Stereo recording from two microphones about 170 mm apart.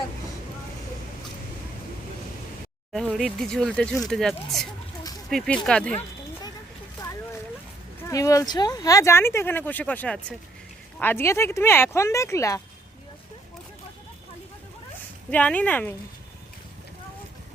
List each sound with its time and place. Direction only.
2.9 s speech: centre (ahead or behind)
8.0 s speech: 20° left (ahead or behind)
15.3 s speech: 10° left (ahead or behind)